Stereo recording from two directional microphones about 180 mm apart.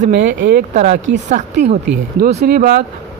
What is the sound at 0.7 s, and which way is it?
Speech, 40° right (ahead or behind).